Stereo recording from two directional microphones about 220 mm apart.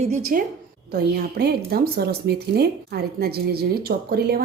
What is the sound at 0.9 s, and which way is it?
A woman's voice, 45° right (ahead or behind).